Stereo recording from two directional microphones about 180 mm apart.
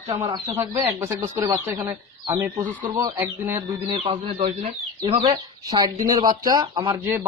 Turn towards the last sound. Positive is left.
turn(degrees=-15)  # may be behind; listen again after turning